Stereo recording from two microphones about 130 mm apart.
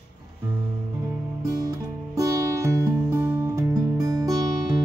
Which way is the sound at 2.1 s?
25° right (ahead or behind).